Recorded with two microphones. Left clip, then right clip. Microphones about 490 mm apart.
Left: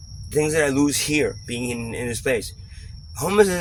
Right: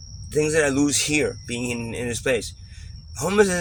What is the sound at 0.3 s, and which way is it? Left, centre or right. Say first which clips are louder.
Speech: even; left.